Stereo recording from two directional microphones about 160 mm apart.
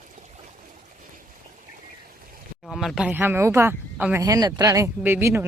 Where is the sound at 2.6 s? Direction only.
Centre (ahead or behind).